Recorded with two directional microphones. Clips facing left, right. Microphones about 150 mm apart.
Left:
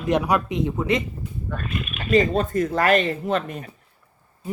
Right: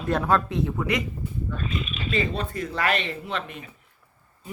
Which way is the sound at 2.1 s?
40° left (ahead or behind).